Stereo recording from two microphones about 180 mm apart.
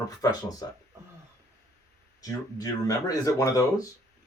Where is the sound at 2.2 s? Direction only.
20° left (ahead or behind).